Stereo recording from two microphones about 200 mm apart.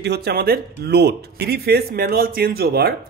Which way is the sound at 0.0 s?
55° right (ahead or behind).